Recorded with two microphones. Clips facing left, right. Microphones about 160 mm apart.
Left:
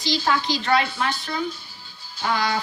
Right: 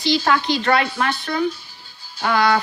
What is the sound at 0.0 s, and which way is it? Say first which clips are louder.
A woman's voice: right 4 dB; 60° right (ahead or behind).